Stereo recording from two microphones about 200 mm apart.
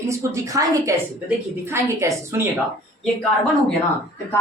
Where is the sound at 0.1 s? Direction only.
15° right (ahead or behind).